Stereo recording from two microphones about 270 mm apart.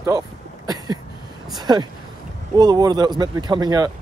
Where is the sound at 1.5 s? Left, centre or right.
Centre.